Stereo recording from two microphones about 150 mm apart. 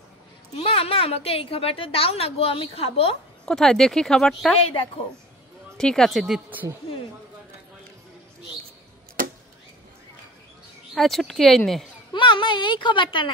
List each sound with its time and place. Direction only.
0.6 s a woman's voice: 40° left (ahead or behind)
3.4 s speech: 5° left (ahead or behind)
5.8 s speech: 5° left (ahead or behind)
11.0 s speech: centre (ahead or behind)
12.1 s a woman's voice: 30° left (ahead or behind)